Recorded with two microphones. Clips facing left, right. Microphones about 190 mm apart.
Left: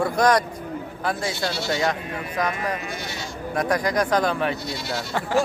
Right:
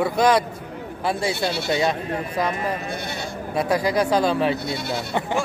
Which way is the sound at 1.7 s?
25° right (ahead or behind).